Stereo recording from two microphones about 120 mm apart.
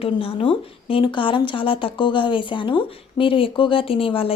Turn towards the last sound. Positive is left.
turn(degrees=50)  # may be behind; listen again after turning